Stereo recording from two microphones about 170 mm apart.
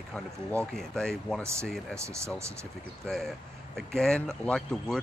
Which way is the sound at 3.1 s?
5° left (ahead or behind).